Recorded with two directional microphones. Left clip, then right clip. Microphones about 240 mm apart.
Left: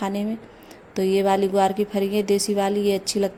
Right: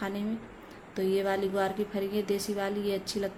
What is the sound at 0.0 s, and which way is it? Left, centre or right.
A woman's voice, left.